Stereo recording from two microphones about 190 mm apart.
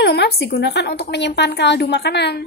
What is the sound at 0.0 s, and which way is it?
A woman's voice, 60° left (ahead or behind).